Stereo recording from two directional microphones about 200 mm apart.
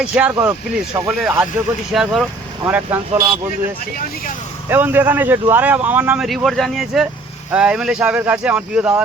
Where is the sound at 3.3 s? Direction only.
25° right (ahead or behind).